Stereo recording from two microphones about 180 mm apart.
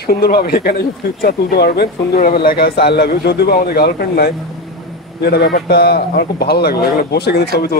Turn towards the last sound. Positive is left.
turn(degrees=65)  # may be behind; listen again after turning